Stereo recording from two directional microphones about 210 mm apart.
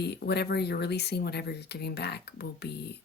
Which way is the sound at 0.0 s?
50° left (ahead or behind).